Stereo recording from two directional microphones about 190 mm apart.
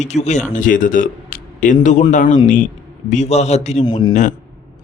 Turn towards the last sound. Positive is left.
turn(degrees=40)  # may be behind; listen again after turning